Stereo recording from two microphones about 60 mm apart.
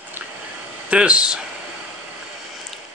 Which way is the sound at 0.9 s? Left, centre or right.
Centre.